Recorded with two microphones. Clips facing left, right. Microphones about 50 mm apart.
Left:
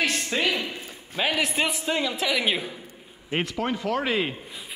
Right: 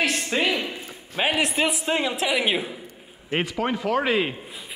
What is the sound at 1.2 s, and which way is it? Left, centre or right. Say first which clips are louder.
A man's voice: right 2 dB; centre.